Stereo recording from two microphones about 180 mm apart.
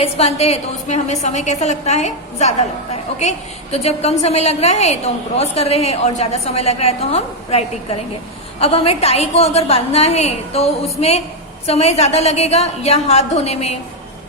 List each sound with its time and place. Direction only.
0.0 s a woman's voice: 35° left (ahead or behind)